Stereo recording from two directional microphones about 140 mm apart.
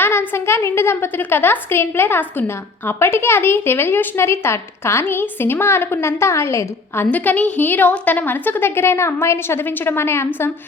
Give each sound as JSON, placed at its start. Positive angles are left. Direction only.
{"t": 0.0, "sound": "a woman's voice", "side_deg": 15}